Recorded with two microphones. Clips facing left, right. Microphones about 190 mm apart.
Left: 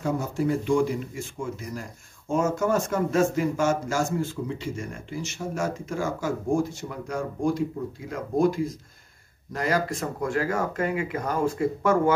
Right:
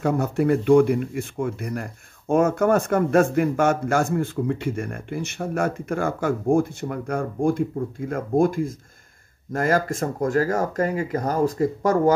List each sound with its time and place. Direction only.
0.0 s speech: 65° right (ahead or behind); by 12.1 s 40° right (ahead or behind)